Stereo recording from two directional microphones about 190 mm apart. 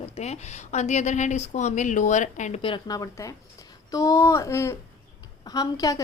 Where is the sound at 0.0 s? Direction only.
35° left (ahead or behind).